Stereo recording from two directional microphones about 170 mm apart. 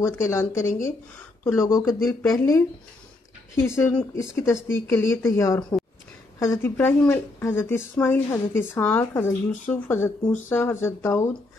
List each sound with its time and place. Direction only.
0.0 s speech: 15° left (ahead or behind)
5.6 s speech: 5° left (ahead or behind)